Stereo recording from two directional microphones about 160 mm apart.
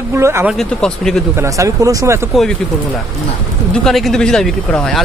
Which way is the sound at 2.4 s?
Centre (ahead or behind).